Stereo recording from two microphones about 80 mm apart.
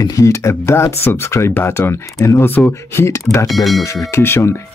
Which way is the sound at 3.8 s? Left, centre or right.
Left.